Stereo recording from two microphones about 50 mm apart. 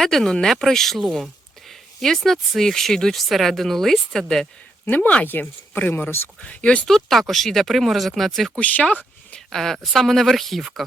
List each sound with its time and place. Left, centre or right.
0.0 s speech: centre
1.1 s a sound: centre
2.6 s speech: centre
4.9 s speech: left
6.4 s speech: left
6.8 s speech: centre
8.5 s speech: left
9.5 s speech: centre